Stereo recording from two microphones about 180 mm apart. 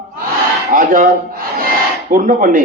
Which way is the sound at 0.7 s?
50° right (ahead or behind).